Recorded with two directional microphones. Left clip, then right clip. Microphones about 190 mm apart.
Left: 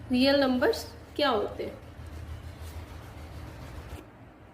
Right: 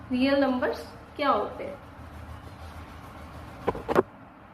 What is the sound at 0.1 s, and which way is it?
Speech, 90° left.